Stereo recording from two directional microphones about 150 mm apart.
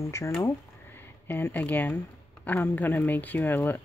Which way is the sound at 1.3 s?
15° left (ahead or behind).